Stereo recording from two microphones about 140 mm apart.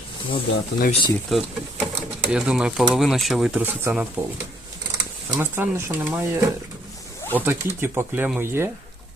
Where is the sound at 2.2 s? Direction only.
5° right (ahead or behind).